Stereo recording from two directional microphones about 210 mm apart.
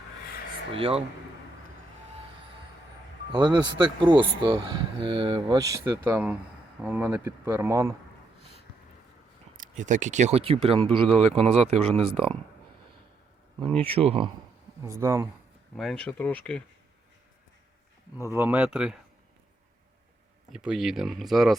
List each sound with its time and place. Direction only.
0.7 s speech: 25° right (ahead or behind)
3.3 s speech: 20° right (ahead or behind)
8.4 s a sound: 30° right (ahead or behind)
9.6 s speech: 35° right (ahead or behind)
13.8 s speech: 25° right (ahead or behind)
14.8 s speech: 15° right (ahead or behind)
15.7 s speech: centre (ahead or behind)
18.3 s speech: 10° right (ahead or behind)
20.5 s speech: 5° right (ahead or behind)